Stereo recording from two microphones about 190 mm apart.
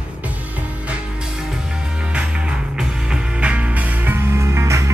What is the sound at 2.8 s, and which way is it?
Music, 5° right (ahead or behind).